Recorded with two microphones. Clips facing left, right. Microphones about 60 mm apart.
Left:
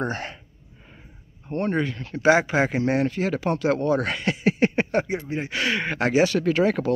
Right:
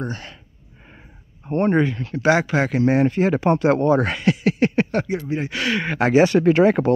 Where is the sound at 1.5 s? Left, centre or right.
Right.